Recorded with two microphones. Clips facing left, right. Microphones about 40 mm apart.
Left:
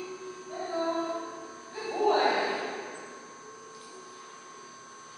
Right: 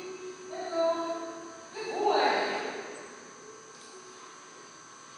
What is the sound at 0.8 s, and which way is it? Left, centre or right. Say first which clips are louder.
Music: right 2 dB; centre.